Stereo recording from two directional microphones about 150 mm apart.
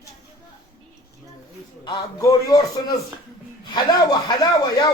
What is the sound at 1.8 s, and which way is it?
Speech, 25° left (ahead or behind).